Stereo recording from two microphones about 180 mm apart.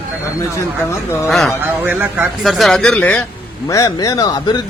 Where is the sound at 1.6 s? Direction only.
10° right (ahead or behind); by 3.2 s 5° left (ahead or behind).